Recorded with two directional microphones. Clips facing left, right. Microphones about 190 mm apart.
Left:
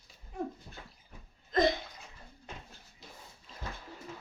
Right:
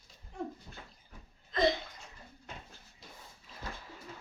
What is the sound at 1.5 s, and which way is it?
Bathtub, 45° left (ahead or behind).